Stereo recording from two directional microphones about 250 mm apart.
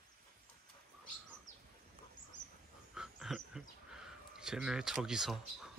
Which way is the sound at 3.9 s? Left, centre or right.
Centre.